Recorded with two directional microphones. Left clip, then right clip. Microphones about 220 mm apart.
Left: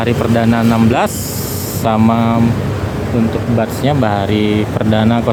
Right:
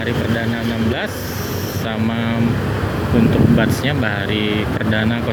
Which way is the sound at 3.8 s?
20° left (ahead or behind).